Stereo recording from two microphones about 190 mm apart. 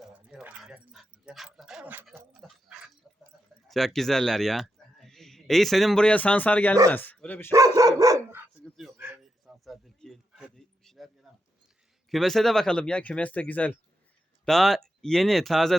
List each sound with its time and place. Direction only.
0.0 s dog: 5° right (ahead or behind)
3.3 s a sound: 5° right (ahead or behind)
3.7 s a man's voice: centre (ahead or behind)
7.8 s dog: 15° right (ahead or behind)
8.6 s a sound: centre (ahead or behind)
12.1 s speech: centre (ahead or behind)